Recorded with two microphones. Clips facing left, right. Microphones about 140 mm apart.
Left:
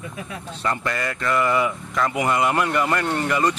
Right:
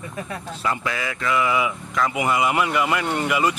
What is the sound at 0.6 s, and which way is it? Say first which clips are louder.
Speech: left 1 dB; 5° right (ahead or behind).